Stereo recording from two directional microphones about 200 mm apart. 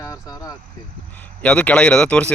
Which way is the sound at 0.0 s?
20° left (ahead or behind).